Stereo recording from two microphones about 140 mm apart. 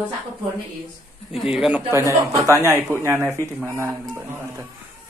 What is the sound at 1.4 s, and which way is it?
Speech, 5° right (ahead or behind).